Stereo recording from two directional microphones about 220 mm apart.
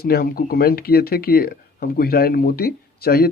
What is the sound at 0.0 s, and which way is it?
Speech, 45° left (ahead or behind).